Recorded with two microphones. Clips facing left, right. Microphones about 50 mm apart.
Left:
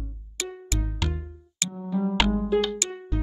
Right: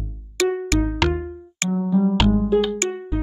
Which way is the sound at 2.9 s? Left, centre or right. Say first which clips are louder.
Right 6 dB; centre.